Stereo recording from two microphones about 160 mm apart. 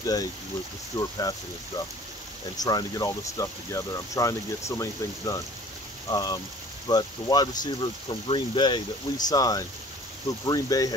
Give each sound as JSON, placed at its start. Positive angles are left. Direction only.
{"t": 0.0, "sound": "speech", "side_deg": 20}
{"t": 2.5, "sound": "speech", "side_deg": 25}